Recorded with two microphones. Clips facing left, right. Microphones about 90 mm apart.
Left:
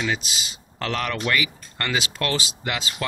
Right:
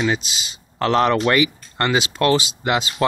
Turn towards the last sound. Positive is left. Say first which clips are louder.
# right 8 dB
turn(degrees=-25)  # may be behind; listen again after turning